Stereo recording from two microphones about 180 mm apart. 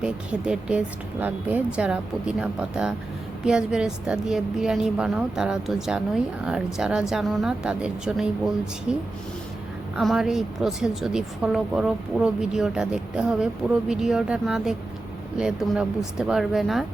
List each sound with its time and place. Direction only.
0.0 s speech: 5° right (ahead or behind)